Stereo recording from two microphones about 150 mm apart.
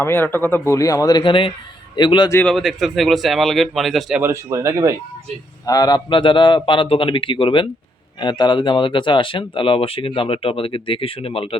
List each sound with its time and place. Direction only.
0.0 s speech: 15° left (ahead or behind); by 2.3 s 30° left (ahead or behind)
2.3 s speech: 10° left (ahead or behind)
4.5 s speech: 20° right (ahead or behind)
5.6 s speech: 25° left (ahead or behind)